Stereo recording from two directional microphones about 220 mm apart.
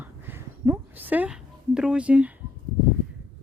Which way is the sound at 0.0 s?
10° right (ahead or behind).